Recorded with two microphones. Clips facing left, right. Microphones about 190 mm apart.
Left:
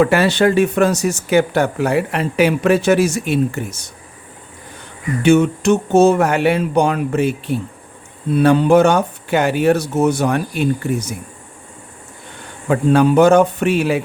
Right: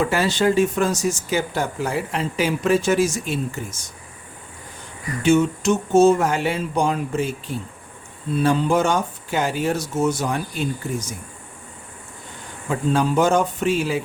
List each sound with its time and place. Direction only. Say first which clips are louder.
0.0 s speech: left 6 dB; 65° left (ahead or behind)
5.2 s speech: left 4 dB; 65° left (ahead or behind)
12.6 s speech: left 7 dB; 65° left (ahead or behind)